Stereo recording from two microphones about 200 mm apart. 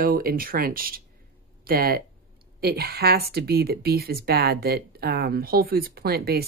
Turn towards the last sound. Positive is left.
turn(degrees=-50)  # may be behind; listen again after turning